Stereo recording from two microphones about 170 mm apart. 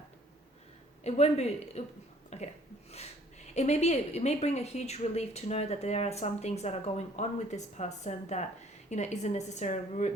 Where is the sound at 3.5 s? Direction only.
40° left (ahead or behind).